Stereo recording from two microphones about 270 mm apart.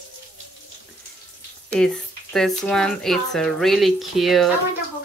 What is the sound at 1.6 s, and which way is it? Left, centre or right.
Speech, centre.